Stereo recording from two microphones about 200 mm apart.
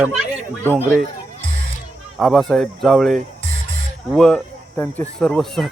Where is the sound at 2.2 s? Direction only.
Centre (ahead or behind).